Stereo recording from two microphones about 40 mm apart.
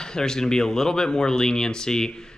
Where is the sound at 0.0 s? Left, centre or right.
Centre.